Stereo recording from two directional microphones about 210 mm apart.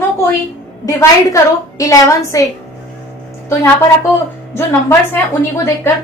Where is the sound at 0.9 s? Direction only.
15° left (ahead or behind).